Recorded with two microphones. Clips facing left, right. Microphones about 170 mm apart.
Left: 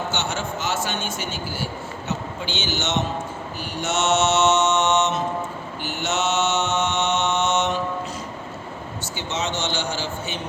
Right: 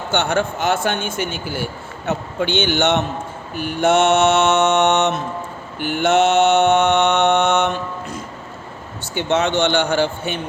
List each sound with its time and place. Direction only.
0.1 s mantra: 55° right (ahead or behind)